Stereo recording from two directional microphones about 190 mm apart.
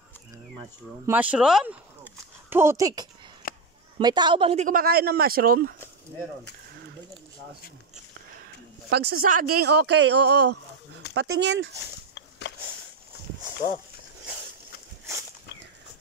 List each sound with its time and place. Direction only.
1.0 s speech: 10° right (ahead or behind)
3.4 s a sound: 50° left (ahead or behind)
4.0 s a man's voice: 20° right (ahead or behind)
4.6 s speech: 50° right (ahead or behind)
8.9 s speech: 55° right (ahead or behind)
12.1 s a sound: 70° left (ahead or behind)